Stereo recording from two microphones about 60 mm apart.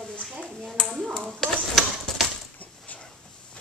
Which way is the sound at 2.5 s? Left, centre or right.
Left.